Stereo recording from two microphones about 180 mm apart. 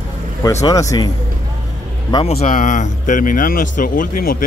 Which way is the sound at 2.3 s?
45° left (ahead or behind).